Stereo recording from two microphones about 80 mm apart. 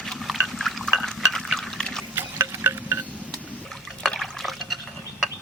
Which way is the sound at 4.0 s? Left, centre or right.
Centre.